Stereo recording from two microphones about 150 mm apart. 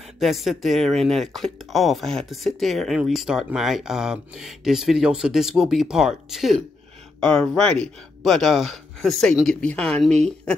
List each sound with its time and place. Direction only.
0.2 s speech: centre (ahead or behind)